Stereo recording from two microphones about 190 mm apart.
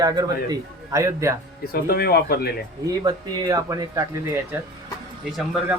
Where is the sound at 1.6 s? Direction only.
55° left (ahead or behind).